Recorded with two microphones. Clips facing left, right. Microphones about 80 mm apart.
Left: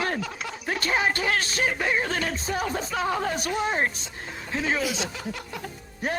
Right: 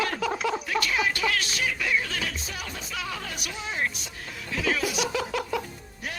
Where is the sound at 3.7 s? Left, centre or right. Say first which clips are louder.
Left 3 dB; left.